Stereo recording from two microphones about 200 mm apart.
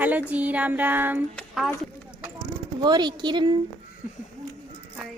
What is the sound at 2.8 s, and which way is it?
Speech, 20° right (ahead or behind).